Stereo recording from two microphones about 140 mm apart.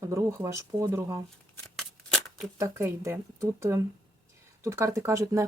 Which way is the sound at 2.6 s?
20° right (ahead or behind).